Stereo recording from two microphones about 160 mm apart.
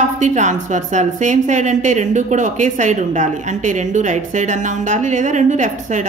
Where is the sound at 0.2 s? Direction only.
50° right (ahead or behind).